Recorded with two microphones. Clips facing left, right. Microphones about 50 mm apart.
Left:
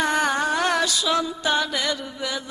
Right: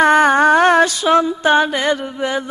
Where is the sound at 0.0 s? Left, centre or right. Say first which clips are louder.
Right 11 dB; right.